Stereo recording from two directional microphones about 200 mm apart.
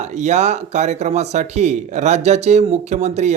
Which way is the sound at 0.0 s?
35° right (ahead or behind).